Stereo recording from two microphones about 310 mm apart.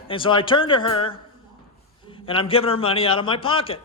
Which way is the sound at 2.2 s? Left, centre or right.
Centre.